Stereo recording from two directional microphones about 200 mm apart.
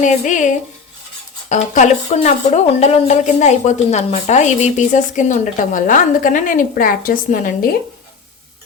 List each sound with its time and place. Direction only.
0.0 s a woman's voice: 40° left (ahead or behind)